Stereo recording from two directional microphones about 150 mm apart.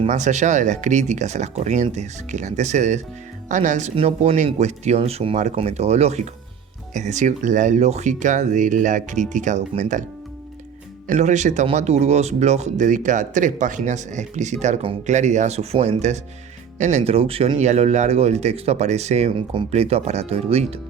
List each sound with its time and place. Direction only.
0.0 s speech: 50° right (ahead or behind)
3.9 s speech: 40° right (ahead or behind)
11.1 s speech: 50° right (ahead or behind)